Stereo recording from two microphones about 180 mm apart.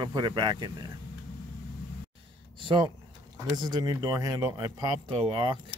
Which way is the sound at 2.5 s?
25° right (ahead or behind).